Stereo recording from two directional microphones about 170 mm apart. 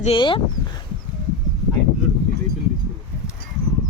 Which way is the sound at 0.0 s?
30° left (ahead or behind).